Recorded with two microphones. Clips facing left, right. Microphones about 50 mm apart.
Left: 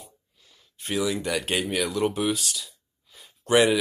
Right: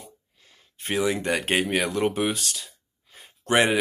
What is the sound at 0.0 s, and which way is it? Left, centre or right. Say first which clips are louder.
Speech: right 2 dB; right.